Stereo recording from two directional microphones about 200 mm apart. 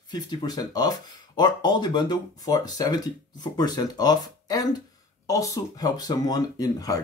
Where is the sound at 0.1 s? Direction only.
20° left (ahead or behind).